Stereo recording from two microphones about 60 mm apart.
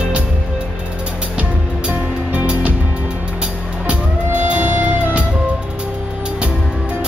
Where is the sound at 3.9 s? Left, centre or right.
Right.